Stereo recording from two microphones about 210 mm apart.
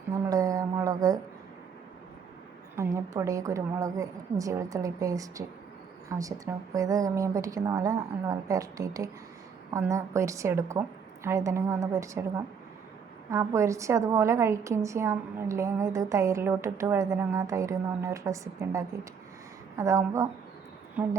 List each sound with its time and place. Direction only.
0.1 s a sound: 15° right (ahead or behind)
2.7 s a woman's voice: 15° right (ahead or behind)
13.3 s a woman's voice: 15° right (ahead or behind)